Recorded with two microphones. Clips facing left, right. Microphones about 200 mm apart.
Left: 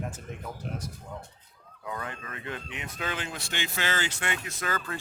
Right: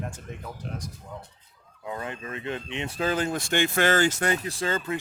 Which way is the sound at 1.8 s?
25° right (ahead or behind).